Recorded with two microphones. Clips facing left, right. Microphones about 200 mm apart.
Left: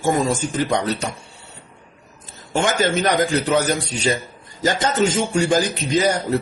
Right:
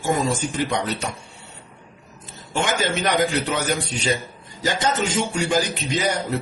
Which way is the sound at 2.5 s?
45° left (ahead or behind).